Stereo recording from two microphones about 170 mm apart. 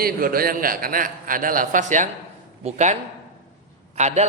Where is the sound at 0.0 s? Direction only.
60° right (ahead or behind).